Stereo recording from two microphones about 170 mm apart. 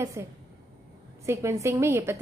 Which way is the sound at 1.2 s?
15° right (ahead or behind).